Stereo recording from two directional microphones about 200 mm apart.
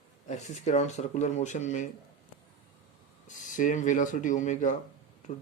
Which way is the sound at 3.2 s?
40° left (ahead or behind).